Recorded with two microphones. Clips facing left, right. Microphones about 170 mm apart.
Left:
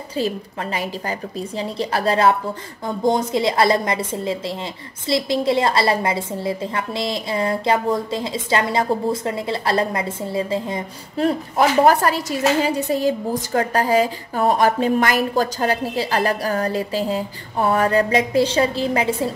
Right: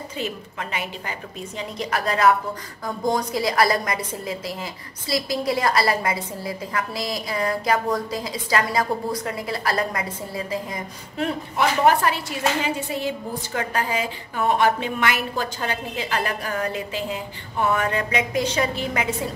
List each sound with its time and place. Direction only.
1.6 s a woman's voice: 30° left (ahead or behind)